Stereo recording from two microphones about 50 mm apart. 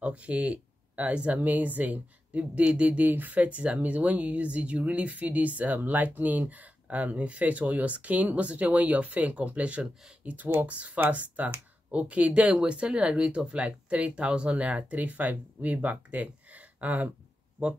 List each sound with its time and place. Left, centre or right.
0.0 s speech: right
3.1 s speech: right